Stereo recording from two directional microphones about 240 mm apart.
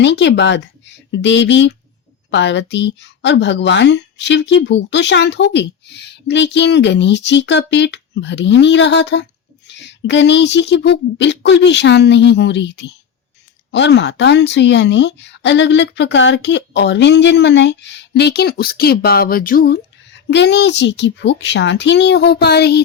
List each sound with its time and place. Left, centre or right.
0.0 s speech: left